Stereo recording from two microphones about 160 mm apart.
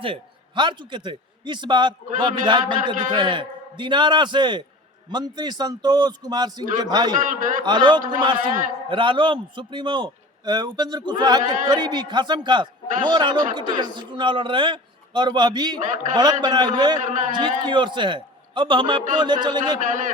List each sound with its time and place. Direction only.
0.0 s a man's voice: 30° right (ahead or behind)
7.2 s a man's voice: 55° right (ahead or behind)
7.6 s a man's voice: 30° right (ahead or behind)
8.4 s a man's voice: 60° right (ahead or behind)
8.9 s a man's voice: 30° right (ahead or behind)
15.8 s a man's voice: 55° right (ahead or behind)
16.1 s a man's voice: 25° right (ahead or behind)
17.0 s a man's voice: 50° right (ahead or behind)
17.7 s a man's voice: 30° right (ahead or behind)
19.8 s a man's voice: 55° right (ahead or behind)